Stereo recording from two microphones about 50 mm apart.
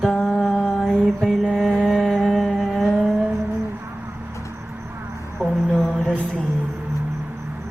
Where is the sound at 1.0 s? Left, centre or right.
Centre.